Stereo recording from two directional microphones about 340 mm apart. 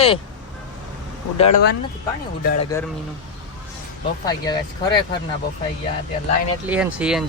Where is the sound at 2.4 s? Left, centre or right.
Left.